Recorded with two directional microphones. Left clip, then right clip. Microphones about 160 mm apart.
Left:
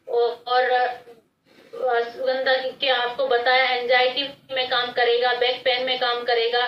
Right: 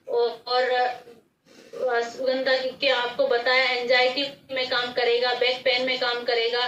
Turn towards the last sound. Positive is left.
turn(degrees=20)  # may be behind; listen again after turning